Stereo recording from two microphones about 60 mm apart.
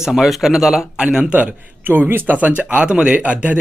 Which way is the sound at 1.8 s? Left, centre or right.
Right.